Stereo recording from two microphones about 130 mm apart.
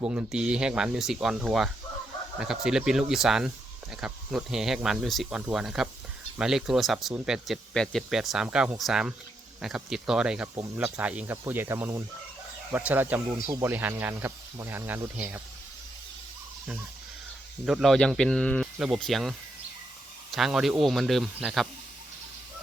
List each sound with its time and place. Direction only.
0.0 s speech: 10° right (ahead or behind)
17.7 s speech: centre (ahead or behind)